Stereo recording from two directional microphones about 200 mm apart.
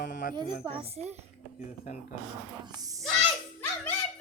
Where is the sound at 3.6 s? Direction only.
10° left (ahead or behind).